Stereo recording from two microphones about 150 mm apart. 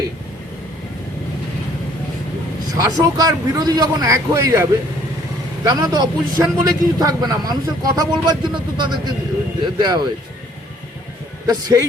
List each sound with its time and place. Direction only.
2.6 s a man's voice: 25° right (ahead or behind)
11.4 s a man's voice: 25° right (ahead or behind)